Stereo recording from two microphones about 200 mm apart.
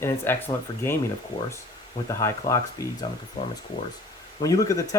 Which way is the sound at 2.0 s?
15° left (ahead or behind).